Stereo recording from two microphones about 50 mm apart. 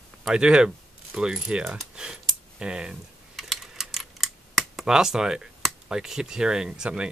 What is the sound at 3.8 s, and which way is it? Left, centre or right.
Speech, centre.